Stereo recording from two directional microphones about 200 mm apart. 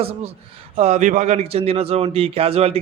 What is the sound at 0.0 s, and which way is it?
A man's voice, 30° right (ahead or behind).